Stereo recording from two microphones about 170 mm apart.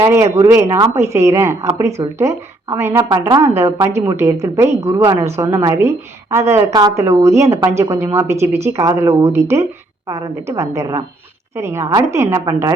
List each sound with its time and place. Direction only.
0.4 s a woman's voice: 15° right (ahead or behind)
3.1 s a woman's voice: 25° right (ahead or behind)